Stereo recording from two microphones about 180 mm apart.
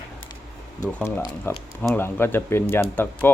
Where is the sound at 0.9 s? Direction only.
10° left (ahead or behind).